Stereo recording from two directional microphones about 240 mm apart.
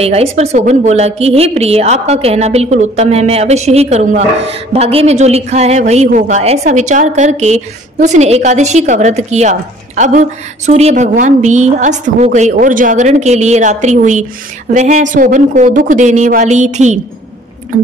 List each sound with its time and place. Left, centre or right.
0.0 s a woman's voice: right